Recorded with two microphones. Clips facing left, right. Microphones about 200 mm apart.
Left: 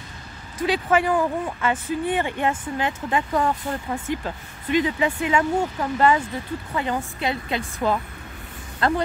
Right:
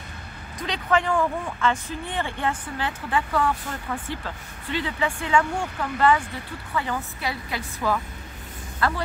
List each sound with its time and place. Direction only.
0.9 s a woman's voice: 10° left (ahead or behind)